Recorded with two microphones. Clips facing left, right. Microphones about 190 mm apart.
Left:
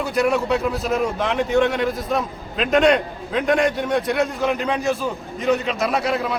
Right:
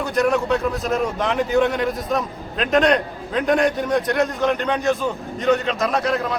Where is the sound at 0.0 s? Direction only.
5° left (ahead or behind).